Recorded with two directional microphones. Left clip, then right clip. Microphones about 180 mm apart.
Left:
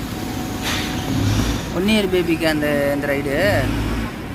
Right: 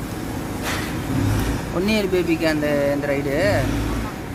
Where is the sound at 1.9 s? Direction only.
Centre (ahead or behind).